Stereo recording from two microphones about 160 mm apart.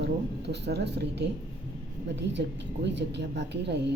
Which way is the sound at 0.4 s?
90° right.